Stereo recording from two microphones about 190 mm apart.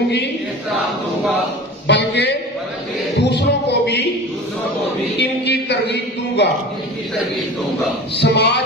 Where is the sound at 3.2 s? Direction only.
65° left (ahead or behind).